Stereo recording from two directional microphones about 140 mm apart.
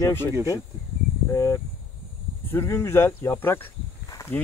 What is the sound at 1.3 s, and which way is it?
Speech, 20° left (ahead or behind).